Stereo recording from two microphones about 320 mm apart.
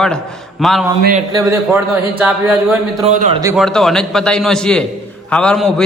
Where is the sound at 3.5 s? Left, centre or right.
Centre.